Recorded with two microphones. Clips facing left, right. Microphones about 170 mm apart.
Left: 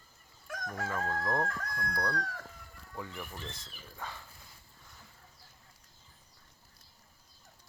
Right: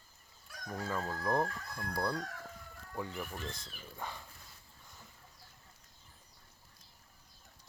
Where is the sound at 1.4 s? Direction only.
90° left.